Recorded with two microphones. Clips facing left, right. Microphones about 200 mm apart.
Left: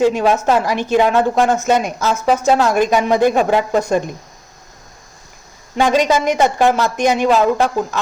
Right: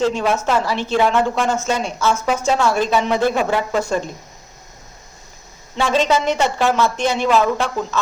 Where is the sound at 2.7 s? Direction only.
15° left (ahead or behind).